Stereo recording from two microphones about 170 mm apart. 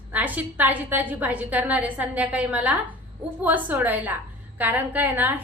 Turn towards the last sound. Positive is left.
turn(degrees=-10)  # may be behind; listen again after turning